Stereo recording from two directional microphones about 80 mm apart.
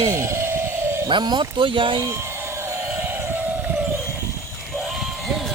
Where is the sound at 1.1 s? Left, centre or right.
Right.